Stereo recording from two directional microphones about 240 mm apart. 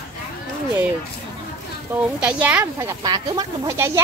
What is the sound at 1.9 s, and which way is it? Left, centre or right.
Speech, centre.